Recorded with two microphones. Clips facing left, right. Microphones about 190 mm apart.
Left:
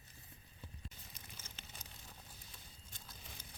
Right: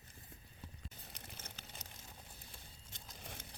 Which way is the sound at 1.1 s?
65° right (ahead or behind).